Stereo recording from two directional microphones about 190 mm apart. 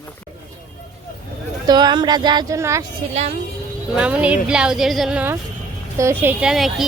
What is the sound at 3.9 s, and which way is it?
A woman's voice, 5° right (ahead or behind).